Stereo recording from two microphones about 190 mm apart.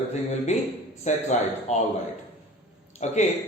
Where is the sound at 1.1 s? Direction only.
35° left (ahead or behind).